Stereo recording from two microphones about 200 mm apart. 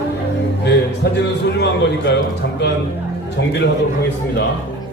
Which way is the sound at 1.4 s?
60° left (ahead or behind).